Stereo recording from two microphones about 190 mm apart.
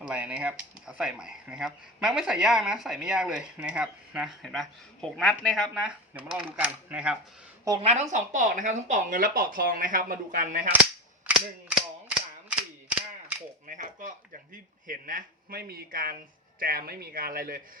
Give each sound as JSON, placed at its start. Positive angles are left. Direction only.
{"t": 0.0, "sound": "speech", "side_deg": -5}
{"t": 7.8, "sound": "a woman's voice", "side_deg": -35}
{"t": 11.3, "sound": "cap gun", "side_deg": -5}
{"t": 13.7, "sound": "chop", "side_deg": -45}
{"t": 14.5, "sound": "speech", "side_deg": -45}